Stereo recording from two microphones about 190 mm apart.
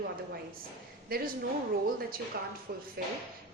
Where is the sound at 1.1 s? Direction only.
50° right (ahead or behind).